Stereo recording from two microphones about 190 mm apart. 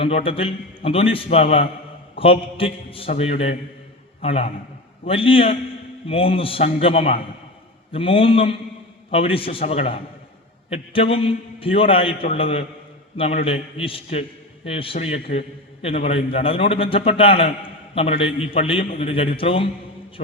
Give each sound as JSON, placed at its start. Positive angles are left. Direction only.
{"t": 0.0, "sound": "a man's voice", "side_deg": 30}